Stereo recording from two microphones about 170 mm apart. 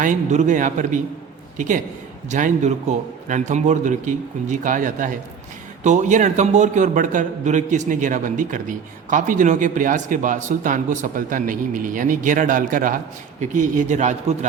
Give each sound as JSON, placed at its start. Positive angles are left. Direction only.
{"t": 0.0, "sound": "a man's voice", "side_deg": -45}